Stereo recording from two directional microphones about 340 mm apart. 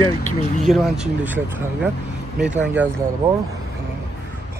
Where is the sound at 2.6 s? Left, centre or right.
Centre.